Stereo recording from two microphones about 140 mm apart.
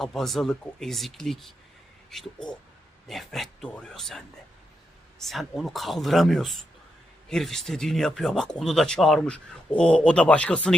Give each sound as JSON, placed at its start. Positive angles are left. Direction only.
{"t": 0.0, "sound": "speech", "side_deg": 0}
{"t": 5.2, "sound": "speech", "side_deg": 0}